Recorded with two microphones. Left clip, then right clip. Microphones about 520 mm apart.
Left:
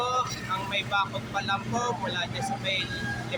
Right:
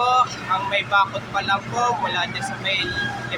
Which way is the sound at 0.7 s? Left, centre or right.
Left.